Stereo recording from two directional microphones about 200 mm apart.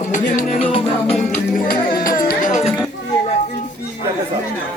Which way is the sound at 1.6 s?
45° left (ahead or behind).